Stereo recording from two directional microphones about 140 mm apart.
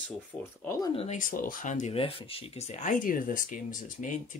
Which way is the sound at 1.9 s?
40° left (ahead or behind).